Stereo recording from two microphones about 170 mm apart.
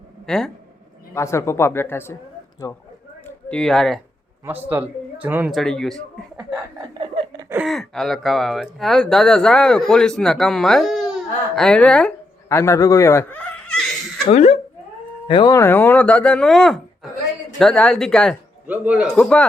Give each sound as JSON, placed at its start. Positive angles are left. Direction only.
{"t": 0.3, "sound": "speech", "side_deg": 5}
{"t": 1.1, "sound": "speech", "side_deg": 15}
{"t": 3.2, "sound": "speech", "side_deg": 5}
{"t": 4.4, "sound": "speech", "side_deg": -10}
{"t": 5.5, "sound": "speech", "side_deg": 0}
{"t": 7.0, "sound": "laughter", "side_deg": -30}
{"t": 7.5, "sound": "speech", "side_deg": 0}
{"t": 12.5, "sound": "speech", "side_deg": 15}
{"t": 14.3, "sound": "speech", "side_deg": 40}
{"t": 15.3, "sound": "speech", "side_deg": 25}
{"t": 15.6, "sound": "speech", "side_deg": 10}
{"t": 18.7, "sound": "a man's voice", "side_deg": -10}
{"t": 19.1, "sound": "speech", "side_deg": 5}